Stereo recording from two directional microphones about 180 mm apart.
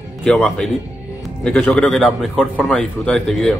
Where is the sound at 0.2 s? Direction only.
5° left (ahead or behind).